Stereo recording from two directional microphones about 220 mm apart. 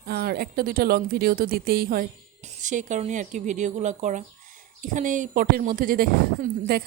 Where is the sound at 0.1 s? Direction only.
45° right (ahead or behind).